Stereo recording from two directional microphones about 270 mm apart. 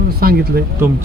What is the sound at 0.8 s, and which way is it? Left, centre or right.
Speech, centre.